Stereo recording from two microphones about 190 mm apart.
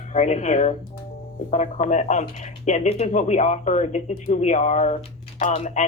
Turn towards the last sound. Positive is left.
turn(degrees=40)  # may be behind; listen again after turning